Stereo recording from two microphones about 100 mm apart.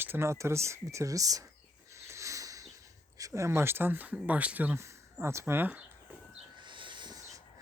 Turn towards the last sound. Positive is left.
turn(degrees=-40)  # may be behind; listen again after turning